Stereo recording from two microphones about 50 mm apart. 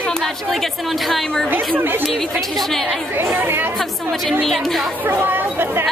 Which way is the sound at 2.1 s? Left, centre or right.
Centre.